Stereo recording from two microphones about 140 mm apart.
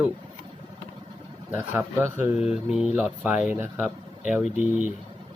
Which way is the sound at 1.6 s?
15° right (ahead or behind).